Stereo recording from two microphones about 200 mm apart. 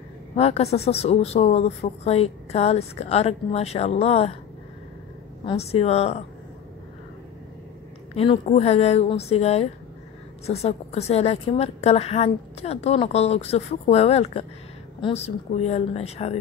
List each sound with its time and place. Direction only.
0.4 s a woman's voice: 30° left (ahead or behind)
5.4 s a woman's voice: 30° left (ahead or behind)
8.1 s a woman's voice: 30° left (ahead or behind)